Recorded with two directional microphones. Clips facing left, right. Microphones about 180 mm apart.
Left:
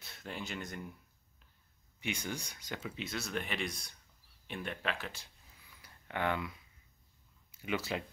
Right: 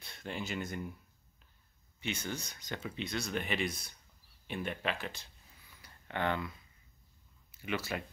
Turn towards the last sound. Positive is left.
turn(degrees=15)  # may be behind; listen again after turning